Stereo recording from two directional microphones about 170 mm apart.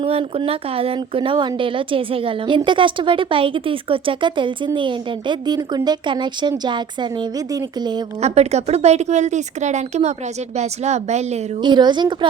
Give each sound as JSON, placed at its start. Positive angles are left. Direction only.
{"t": 0.0, "sound": "speech", "side_deg": -35}
{"t": 8.2, "sound": "speech", "side_deg": -40}
{"t": 11.6, "sound": "speech", "side_deg": -25}